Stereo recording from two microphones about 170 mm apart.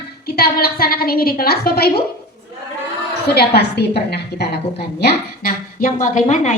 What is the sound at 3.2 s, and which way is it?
A woman's voice, 70° left (ahead or behind).